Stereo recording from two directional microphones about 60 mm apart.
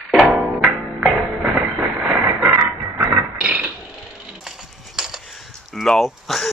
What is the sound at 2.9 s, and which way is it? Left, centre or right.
Music, right.